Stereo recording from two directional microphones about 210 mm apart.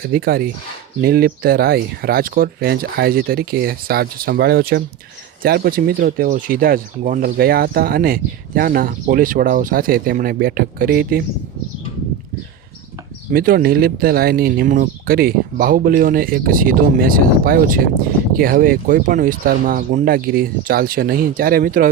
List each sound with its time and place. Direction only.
0.0 s speech: 45° right (ahead or behind)
13.3 s speech: 45° right (ahead or behind)